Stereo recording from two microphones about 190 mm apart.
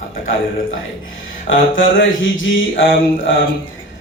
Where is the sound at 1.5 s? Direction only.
90° left.